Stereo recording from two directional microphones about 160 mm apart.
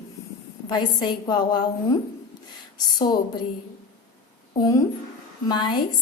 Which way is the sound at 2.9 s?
25° left (ahead or behind).